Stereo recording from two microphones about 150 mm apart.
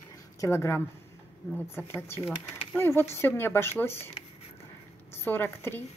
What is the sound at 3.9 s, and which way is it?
Speech, 45° left (ahead or behind).